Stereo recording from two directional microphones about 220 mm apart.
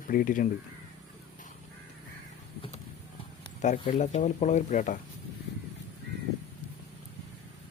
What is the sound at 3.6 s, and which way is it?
Speech, 30° left (ahead or behind).